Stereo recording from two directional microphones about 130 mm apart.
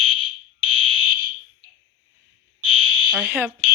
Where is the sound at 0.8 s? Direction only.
40° left (ahead or behind).